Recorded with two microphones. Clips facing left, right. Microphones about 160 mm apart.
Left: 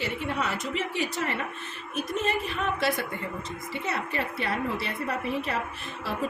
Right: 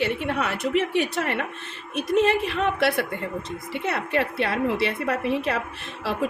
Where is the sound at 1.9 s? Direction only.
75° right (ahead or behind).